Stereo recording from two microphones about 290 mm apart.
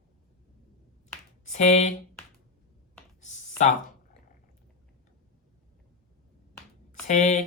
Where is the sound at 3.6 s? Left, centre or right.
Left.